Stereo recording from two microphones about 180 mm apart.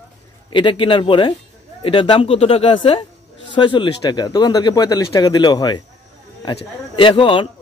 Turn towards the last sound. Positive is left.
turn(degrees=30)  # may be behind; listen again after turning